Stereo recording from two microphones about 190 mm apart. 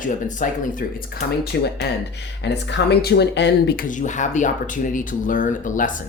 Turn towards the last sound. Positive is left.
turn(degrees=45)  # may be behind; listen again after turning